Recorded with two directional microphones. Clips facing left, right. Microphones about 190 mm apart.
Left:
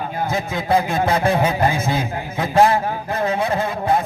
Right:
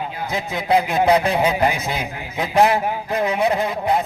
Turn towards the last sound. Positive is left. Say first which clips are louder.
# even
turn(degrees=-15)  # may be behind; listen again after turning